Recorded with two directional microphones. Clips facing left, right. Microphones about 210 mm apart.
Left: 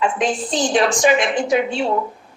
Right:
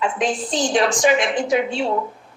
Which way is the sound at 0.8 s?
60° left (ahead or behind).